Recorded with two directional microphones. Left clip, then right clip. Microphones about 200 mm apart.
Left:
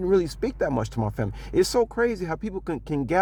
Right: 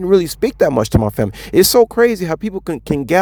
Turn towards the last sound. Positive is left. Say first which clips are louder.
# right 9 dB
turn(degrees=-25)  # may be behind; listen again after turning